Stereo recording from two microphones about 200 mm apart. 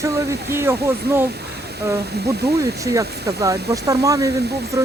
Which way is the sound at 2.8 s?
15° right (ahead or behind).